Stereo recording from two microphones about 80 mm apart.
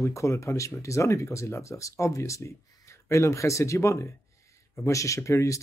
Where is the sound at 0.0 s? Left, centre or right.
Left.